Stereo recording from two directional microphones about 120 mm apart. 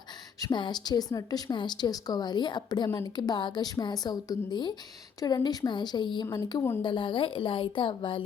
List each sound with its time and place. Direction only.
0.3 s a woman's voice: 35° left (ahead or behind)